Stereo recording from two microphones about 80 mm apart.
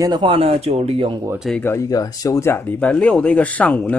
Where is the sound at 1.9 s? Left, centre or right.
Left.